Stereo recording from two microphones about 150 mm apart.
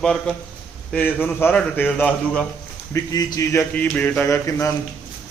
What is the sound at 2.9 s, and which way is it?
Speech, 25° left (ahead or behind).